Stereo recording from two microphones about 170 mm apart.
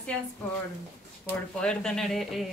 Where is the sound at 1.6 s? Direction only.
5° left (ahead or behind).